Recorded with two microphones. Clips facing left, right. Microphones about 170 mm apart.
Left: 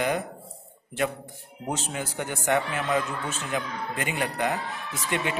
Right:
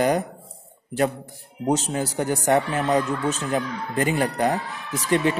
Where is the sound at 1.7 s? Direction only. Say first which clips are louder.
Right 8 dB; 35° right (ahead or behind).